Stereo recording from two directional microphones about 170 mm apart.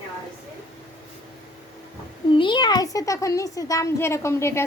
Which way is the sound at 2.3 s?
30° left (ahead or behind).